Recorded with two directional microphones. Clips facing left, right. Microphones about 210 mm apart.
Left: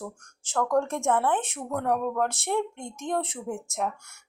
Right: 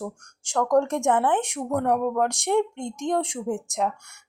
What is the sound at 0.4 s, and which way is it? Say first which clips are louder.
Speech: right 4 dB; 15° right (ahead or behind).